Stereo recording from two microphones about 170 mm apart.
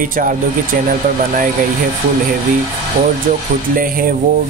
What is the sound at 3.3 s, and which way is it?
Speech, 55° right (ahead or behind).